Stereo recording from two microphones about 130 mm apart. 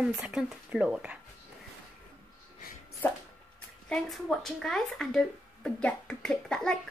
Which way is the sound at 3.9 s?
Centre (ahead or behind).